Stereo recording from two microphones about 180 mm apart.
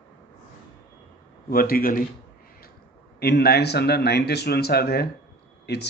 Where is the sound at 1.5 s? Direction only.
55° left (ahead or behind).